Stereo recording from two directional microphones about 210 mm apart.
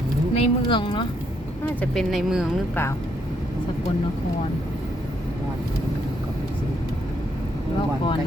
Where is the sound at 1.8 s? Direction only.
Centre (ahead or behind).